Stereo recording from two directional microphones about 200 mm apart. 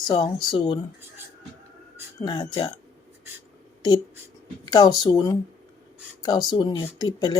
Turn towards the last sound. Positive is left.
turn(degrees=20)  # may be behind; listen again after turning